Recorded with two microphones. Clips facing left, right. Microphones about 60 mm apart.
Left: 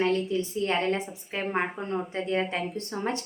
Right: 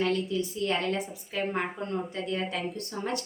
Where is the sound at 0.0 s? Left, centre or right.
Left.